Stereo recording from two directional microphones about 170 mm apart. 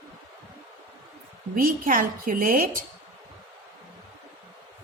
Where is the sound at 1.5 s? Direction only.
55° right (ahead or behind).